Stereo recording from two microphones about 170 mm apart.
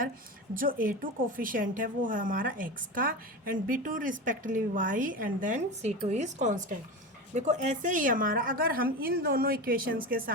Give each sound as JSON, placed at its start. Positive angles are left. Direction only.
{"t": 0.5, "sound": "a woman's voice", "side_deg": -55}